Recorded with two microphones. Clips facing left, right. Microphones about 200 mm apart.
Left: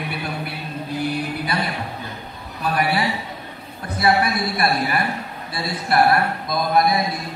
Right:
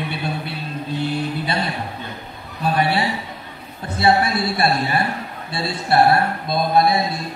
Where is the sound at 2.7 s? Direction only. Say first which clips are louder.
Right 2 dB; 25° right (ahead or behind).